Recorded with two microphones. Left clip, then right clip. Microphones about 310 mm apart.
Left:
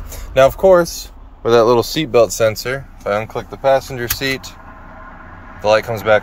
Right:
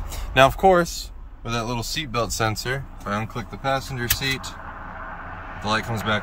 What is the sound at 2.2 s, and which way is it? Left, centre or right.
Speech, centre.